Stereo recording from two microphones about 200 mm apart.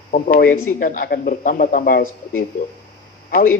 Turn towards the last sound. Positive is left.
turn(degrees=45)  # may be behind; listen again after turning